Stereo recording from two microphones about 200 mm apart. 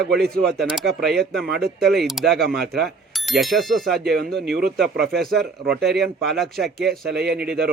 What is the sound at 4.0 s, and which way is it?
Speech, 50° right (ahead or behind).